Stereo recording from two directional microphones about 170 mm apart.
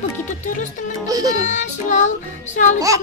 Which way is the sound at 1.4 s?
45° left (ahead or behind).